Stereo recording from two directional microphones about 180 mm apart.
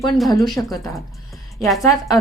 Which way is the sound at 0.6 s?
10° left (ahead or behind).